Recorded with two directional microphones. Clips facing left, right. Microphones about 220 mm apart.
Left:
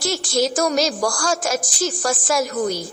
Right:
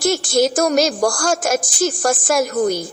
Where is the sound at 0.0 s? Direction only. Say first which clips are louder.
Right 5 dB; 50° right (ahead or behind).